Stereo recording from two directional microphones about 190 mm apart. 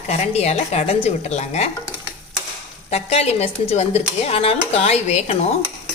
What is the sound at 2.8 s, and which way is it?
Speech, 35° left (ahead or behind).